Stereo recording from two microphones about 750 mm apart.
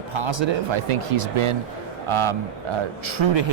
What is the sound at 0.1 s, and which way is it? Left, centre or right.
A man's voice, right.